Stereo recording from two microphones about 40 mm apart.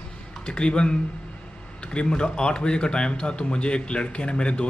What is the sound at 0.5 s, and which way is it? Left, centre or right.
A man's voice, left.